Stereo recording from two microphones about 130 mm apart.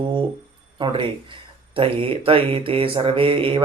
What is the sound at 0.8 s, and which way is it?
Mantra, 40° right (ahead or behind).